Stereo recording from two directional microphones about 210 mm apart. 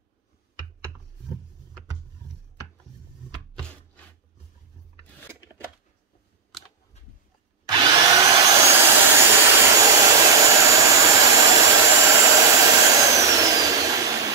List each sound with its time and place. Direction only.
7.7 s vacuum cleaner: 20° right (ahead or behind)